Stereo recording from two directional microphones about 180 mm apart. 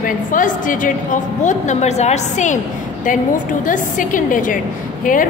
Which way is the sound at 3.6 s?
45° left (ahead or behind).